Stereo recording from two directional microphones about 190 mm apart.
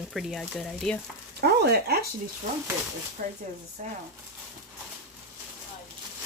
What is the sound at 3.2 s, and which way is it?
Speech, 45° right (ahead or behind).